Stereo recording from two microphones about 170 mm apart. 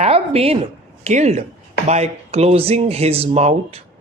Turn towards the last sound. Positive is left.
turn(degrees=-40)  # may be behind; listen again after turning